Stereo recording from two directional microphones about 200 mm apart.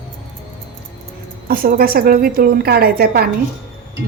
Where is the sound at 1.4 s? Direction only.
45° right (ahead or behind).